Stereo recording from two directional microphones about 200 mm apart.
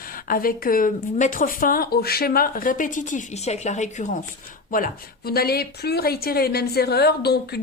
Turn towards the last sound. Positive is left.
turn(degrees=55)  # may be behind; listen again after turning